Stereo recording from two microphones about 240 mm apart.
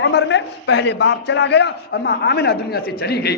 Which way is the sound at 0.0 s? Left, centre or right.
Left.